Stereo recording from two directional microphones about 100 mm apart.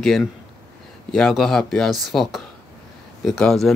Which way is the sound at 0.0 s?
Centre (ahead or behind).